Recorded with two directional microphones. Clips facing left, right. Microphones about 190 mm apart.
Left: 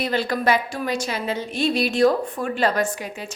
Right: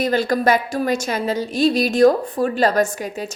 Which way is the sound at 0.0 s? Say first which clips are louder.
Right 4 dB; 45° right (ahead or behind).